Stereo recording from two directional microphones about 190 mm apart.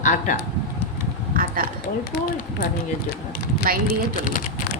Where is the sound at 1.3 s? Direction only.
50° right (ahead or behind).